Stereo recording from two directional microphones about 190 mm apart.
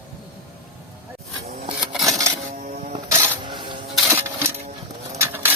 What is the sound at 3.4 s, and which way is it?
Music, 25° right (ahead or behind).